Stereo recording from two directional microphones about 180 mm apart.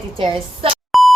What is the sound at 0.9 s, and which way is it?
Beep, centre (ahead or behind).